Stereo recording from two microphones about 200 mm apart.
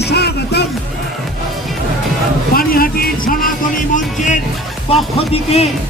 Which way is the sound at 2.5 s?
45° left (ahead or behind).